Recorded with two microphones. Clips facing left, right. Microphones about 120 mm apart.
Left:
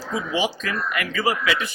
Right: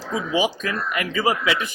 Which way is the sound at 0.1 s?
25° right (ahead or behind).